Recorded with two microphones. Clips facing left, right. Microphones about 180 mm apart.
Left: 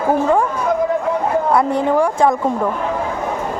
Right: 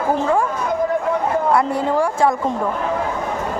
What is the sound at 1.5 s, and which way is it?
Speech, 20° left (ahead or behind).